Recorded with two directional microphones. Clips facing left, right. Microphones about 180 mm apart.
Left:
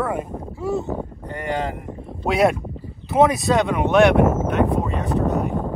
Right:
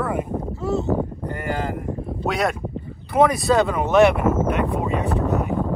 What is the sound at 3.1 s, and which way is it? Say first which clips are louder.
Speech: left 1 dB; 25° left (ahead or behind).